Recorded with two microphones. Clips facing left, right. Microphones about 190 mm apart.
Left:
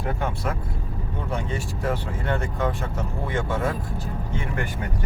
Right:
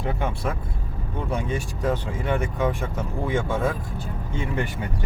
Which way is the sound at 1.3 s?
15° right (ahead or behind).